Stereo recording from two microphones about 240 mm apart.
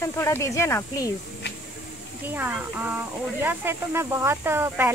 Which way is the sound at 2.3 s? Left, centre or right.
Centre.